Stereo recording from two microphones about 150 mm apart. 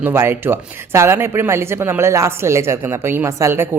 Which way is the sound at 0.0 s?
15° right (ahead or behind).